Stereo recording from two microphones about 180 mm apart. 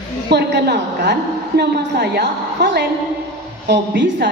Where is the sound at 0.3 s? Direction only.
70° right (ahead or behind).